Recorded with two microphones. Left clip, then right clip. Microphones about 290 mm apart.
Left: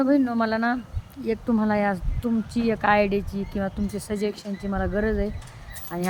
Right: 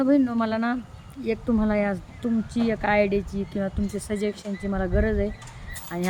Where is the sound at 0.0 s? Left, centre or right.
Centre.